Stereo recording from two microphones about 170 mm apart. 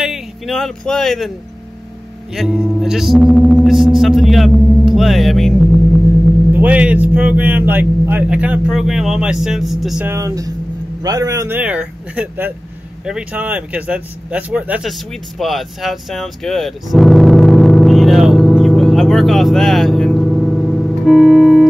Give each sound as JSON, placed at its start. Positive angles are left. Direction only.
{"t": 0.0, "sound": "a sound", "side_deg": 0}
{"t": 2.3, "sound": "speech", "side_deg": 0}
{"t": 10.0, "sound": "speech", "side_deg": -20}
{"t": 13.0, "sound": "vehicle", "side_deg": -5}